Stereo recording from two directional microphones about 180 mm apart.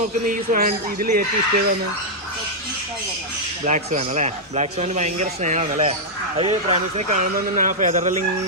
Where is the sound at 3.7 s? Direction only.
40° right (ahead or behind).